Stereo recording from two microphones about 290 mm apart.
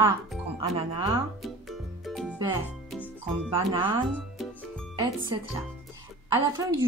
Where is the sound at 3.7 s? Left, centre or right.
Centre.